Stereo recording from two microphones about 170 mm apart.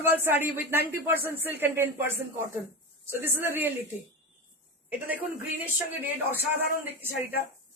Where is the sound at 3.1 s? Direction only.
15° right (ahead or behind).